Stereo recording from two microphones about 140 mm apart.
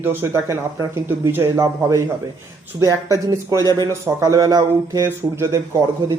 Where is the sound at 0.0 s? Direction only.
15° right (ahead or behind).